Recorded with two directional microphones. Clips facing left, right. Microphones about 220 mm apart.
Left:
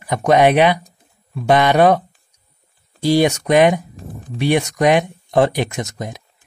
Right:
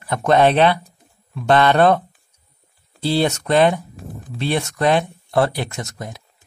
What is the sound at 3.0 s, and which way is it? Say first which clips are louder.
Speech: left 4 dB; 15° left (ahead or behind).